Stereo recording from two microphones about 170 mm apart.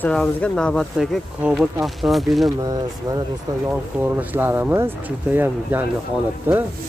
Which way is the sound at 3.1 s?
25° right (ahead or behind).